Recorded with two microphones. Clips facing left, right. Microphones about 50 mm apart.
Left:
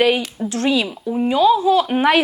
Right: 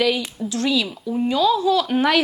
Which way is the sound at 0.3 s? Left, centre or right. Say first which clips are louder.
Left 3 dB; left.